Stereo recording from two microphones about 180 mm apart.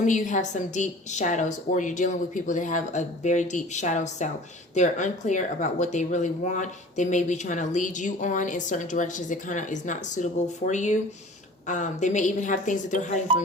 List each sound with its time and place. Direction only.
0.0 s speech: 45° left (ahead or behind)